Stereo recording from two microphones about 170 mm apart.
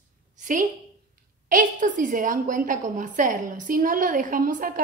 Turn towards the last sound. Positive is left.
turn(degrees=-55)  # may be behind; listen again after turning